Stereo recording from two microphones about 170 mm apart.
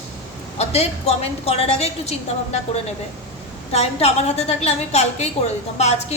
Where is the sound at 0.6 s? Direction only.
40° left (ahead or behind).